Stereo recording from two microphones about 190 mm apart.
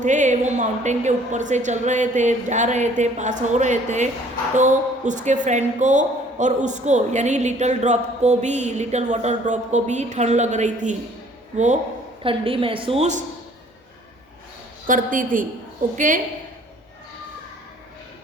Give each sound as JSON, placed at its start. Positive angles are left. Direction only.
{"t": 0.0, "sound": "speech", "side_deg": -40}
{"t": 12.2, "sound": "a woman's voice", "side_deg": -30}
{"t": 14.8, "sound": "a woman's voice", "side_deg": -45}